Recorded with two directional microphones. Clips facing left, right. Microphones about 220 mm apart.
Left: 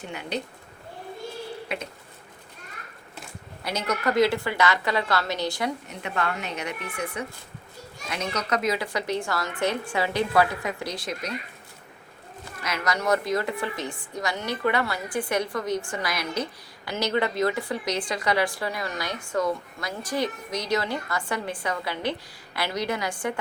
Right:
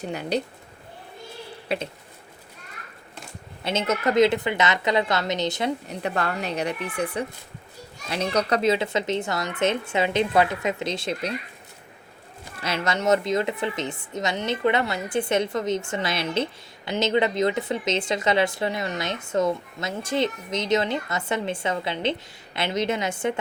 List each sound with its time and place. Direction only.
0.0 s speech: 40° right (ahead or behind)
1.6 s speech: 35° right (ahead or behind)
3.6 s speech: 25° right (ahead or behind)
5.9 s speech: 35° right (ahead or behind)
12.6 s speech: 25° right (ahead or behind)